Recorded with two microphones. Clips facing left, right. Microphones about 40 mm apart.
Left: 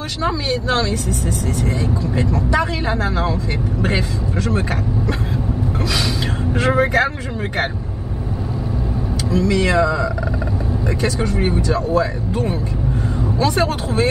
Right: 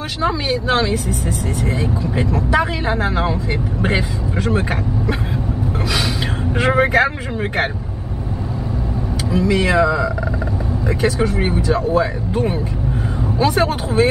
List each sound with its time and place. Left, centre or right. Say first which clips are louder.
0.2 s speech: right 1 dB; centre
6.5 s speech: right 2 dB; centre
9.3 s speech: right 1 dB; centre